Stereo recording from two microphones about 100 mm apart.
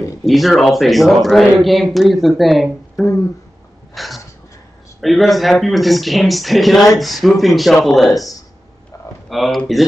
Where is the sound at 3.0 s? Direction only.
30° left (ahead or behind).